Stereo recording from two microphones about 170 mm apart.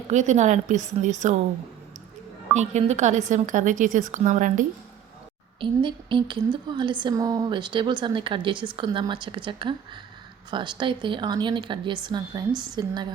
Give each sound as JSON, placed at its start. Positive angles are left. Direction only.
{"t": 0.1, "sound": "a woman's voice", "side_deg": -45}
{"t": 2.5, "sound": "a woman's voice", "side_deg": -40}
{"t": 5.5, "sound": "a woman's voice", "side_deg": -30}